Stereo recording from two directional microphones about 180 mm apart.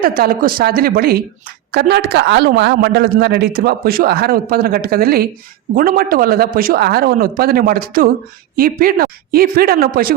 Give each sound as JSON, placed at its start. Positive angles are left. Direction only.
{"t": 0.0, "sound": "speech", "side_deg": -55}